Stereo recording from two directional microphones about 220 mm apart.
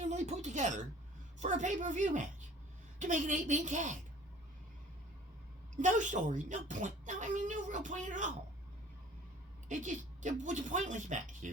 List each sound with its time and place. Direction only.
0.0 s a sound: 30° right (ahead or behind)
1.4 s a woman's voice: 35° right (ahead or behind)
5.7 s a woman's voice: 35° right (ahead or behind)
9.6 s a woman's voice: 35° right (ahead or behind)